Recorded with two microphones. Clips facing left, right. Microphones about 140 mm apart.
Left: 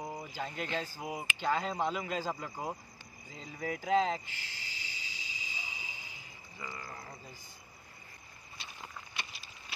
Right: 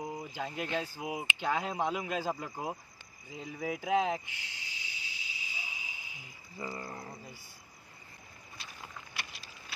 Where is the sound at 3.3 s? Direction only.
10° right (ahead or behind).